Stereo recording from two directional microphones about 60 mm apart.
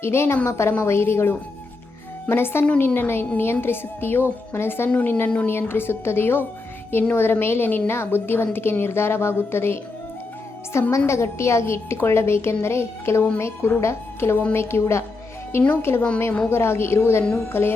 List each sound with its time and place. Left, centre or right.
0.0 s a woman's voice: left
10.9 s a woman's voice: left